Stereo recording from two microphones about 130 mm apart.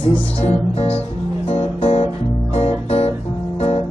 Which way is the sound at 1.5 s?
50° left (ahead or behind).